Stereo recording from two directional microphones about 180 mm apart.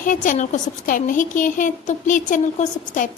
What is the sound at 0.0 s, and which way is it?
A woman's voice, 45° left (ahead or behind).